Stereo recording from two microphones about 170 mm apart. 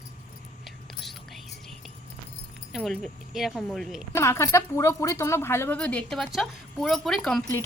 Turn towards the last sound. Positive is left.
turn(degrees=0)  # may be behind; listen again after turning